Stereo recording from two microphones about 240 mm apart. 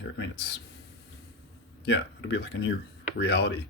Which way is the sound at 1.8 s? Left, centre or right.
Left.